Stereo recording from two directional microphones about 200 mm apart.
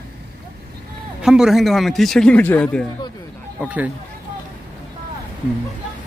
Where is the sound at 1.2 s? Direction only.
5° right (ahead or behind).